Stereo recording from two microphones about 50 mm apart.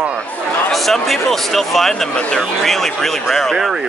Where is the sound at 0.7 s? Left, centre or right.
Centre.